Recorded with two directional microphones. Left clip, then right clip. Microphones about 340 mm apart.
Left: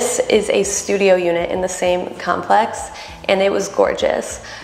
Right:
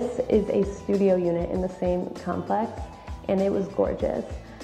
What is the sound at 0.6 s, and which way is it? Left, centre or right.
Speech, left.